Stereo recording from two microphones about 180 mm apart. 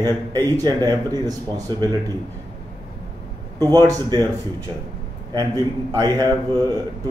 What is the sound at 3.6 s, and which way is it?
Speech, 20° right (ahead or behind).